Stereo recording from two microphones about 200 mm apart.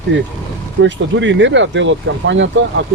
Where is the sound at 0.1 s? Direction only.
65° right (ahead or behind).